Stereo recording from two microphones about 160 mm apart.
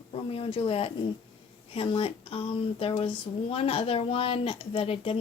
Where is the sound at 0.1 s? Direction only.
35° left (ahead or behind).